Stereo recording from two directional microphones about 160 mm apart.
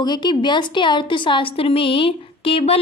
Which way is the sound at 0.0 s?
25° left (ahead or behind).